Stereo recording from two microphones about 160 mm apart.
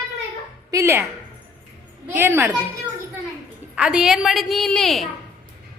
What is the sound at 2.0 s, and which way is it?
Speech, 10° right (ahead or behind).